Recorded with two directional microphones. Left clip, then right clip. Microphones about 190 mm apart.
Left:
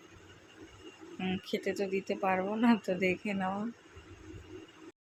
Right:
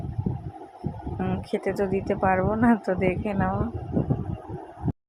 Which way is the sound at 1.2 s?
20° right (ahead or behind).